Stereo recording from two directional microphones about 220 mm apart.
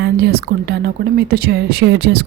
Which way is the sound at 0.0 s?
45° right (ahead or behind).